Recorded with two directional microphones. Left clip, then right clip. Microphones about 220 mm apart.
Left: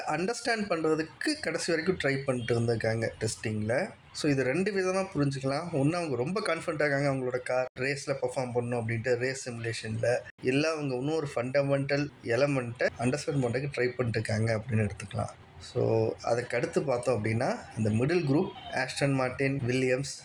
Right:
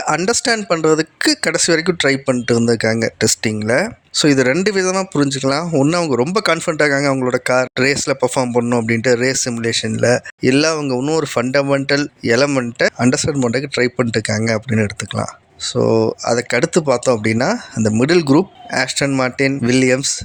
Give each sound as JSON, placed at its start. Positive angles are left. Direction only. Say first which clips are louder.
{"t": 0.0, "sound": "speech", "louder": "right 14 dB", "side_deg": -45}